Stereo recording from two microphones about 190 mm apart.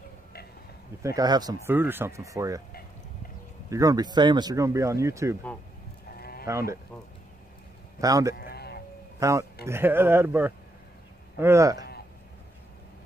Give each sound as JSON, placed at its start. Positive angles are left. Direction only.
{"t": 1.0, "sound": "speech", "side_deg": -20}
{"t": 3.7, "sound": "speech", "side_deg": -20}
{"t": 6.1, "sound": "sheep", "side_deg": 55}
{"t": 6.4, "sound": "speech", "side_deg": -15}
{"t": 8.0, "sound": "speech", "side_deg": -20}
{"t": 8.4, "sound": "sheep", "side_deg": 60}
{"t": 9.2, "sound": "speech", "side_deg": -15}